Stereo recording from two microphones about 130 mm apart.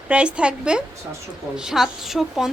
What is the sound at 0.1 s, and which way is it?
A woman's voice, 10° right (ahead or behind).